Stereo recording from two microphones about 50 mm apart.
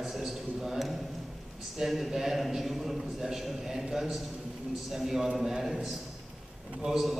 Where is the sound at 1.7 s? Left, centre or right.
Centre.